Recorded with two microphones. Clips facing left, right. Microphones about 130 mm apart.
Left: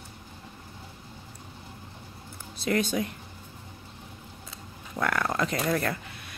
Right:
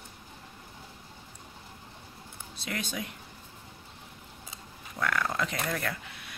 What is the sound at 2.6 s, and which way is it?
Speech, 40° left (ahead or behind).